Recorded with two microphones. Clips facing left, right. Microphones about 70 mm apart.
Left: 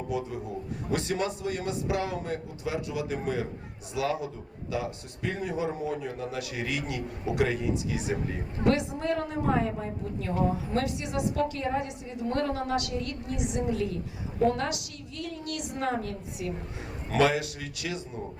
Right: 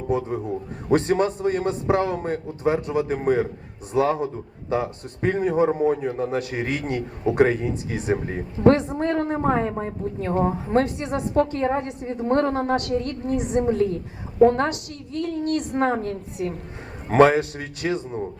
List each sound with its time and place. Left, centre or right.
0.1 s a woman's voice: right